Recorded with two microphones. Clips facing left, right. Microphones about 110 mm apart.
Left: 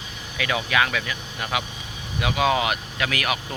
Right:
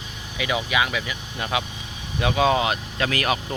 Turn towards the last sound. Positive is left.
turn(degrees=-30)  # may be behind; listen again after turning